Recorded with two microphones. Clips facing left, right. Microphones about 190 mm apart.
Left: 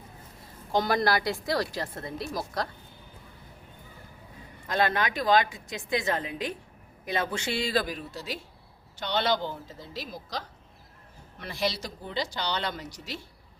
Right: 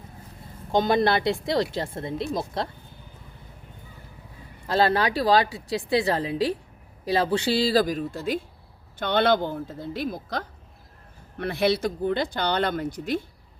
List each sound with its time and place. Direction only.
0.7 s speech: 20° right (ahead or behind)
4.7 s a woman's voice: 35° right (ahead or behind); by 13.2 s 55° right (ahead or behind)